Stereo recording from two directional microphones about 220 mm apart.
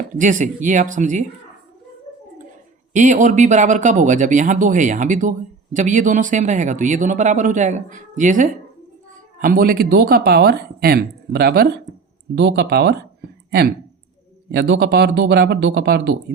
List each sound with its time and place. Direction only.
0.2 s speech: 35° right (ahead or behind)
2.9 s speech: 35° right (ahead or behind)